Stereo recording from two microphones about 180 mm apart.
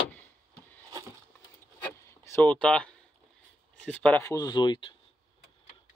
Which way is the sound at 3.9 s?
5° left (ahead or behind).